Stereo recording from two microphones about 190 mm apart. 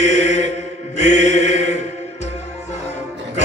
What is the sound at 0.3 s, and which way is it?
Mantra, 35° left (ahead or behind).